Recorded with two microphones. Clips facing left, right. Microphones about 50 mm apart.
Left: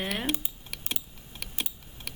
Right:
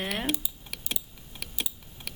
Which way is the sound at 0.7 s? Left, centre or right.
Centre.